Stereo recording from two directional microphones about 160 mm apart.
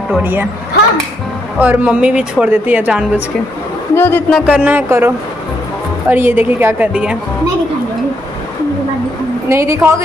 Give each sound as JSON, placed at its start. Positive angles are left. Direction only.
{"t": 0.2, "sound": "a woman's voice", "side_deg": -10}
{"t": 1.6, "sound": "a woman's voice", "side_deg": -10}
{"t": 3.9, "sound": "a man's voice", "side_deg": 15}
{"t": 4.3, "sound": "a woman's voice", "side_deg": -10}
{"t": 9.5, "sound": "a woman's voice", "side_deg": -15}